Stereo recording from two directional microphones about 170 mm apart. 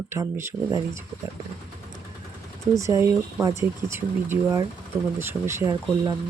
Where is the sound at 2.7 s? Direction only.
20° right (ahead or behind).